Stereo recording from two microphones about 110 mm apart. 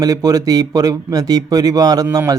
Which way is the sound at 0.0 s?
35° right (ahead or behind).